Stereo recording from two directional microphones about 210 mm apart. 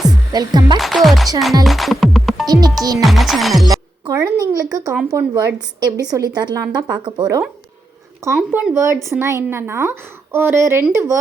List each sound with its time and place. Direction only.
0.3 s speech: 20° right (ahead or behind)
0.8 s music: centre (ahead or behind)
1.6 s speech: centre (ahead or behind)
2.5 s speech: 20° right (ahead or behind)
3.0 s music: centre (ahead or behind)
3.7 s music: 15° right (ahead or behind)
4.5 s a woman's voice: 15° right (ahead or behind)